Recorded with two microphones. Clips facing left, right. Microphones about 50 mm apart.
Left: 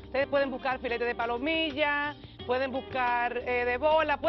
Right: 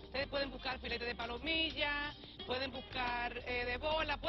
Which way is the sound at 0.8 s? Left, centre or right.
Left.